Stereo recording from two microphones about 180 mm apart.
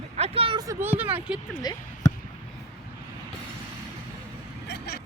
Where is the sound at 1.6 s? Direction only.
20° left (ahead or behind).